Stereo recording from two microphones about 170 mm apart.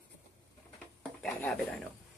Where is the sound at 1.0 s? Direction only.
5° left (ahead or behind).